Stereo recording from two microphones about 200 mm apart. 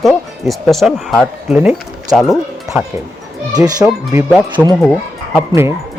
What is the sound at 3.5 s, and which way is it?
Speech, 20° right (ahead or behind).